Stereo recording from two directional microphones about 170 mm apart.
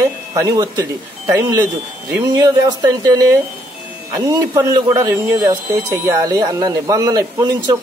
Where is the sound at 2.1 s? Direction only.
20° right (ahead or behind).